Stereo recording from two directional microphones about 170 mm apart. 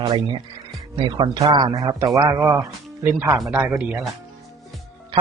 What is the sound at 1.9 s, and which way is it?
A man's voice, 20° right (ahead or behind).